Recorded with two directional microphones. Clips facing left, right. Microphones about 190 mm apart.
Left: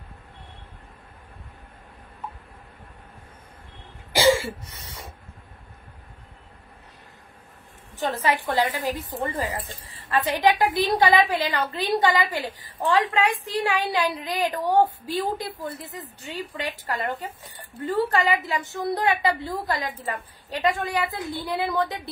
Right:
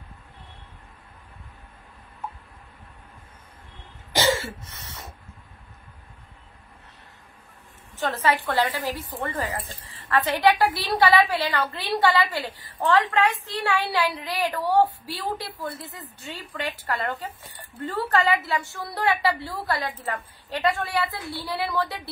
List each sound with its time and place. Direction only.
4.1 s cough: 10° left (ahead or behind)
7.9 s a woman's voice: 15° left (ahead or behind)